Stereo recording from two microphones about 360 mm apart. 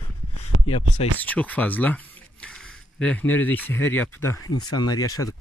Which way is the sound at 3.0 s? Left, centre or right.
Centre.